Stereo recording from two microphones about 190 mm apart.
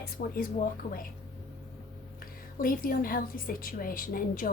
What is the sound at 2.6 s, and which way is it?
A woman's voice, 50° left (ahead or behind).